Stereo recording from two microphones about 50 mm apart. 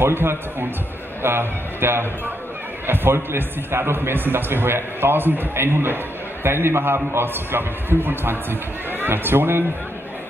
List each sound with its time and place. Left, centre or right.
0.0 s a man's voice: right
5.7 s a man's voice: right